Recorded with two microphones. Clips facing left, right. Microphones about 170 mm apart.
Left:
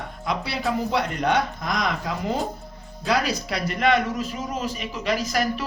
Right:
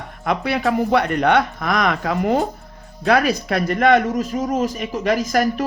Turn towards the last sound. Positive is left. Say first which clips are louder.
# right 6 dB
turn(degrees=-45)  # may be behind; listen again after turning